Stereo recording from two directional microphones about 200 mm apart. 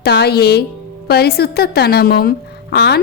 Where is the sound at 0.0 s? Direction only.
55° left (ahead or behind).